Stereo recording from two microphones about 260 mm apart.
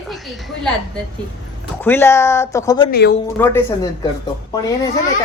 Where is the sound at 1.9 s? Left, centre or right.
Centre.